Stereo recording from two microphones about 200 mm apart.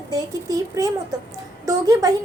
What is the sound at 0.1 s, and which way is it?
A child's voice, 20° right (ahead or behind).